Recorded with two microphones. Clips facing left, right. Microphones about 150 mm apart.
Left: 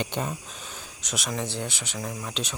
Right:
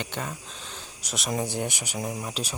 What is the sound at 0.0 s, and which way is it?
Speech, 15° left (ahead or behind).